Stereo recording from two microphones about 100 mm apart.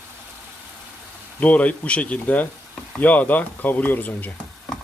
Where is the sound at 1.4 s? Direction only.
15° left (ahead or behind).